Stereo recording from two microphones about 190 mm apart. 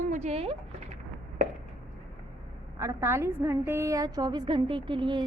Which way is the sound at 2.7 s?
15° right (ahead or behind).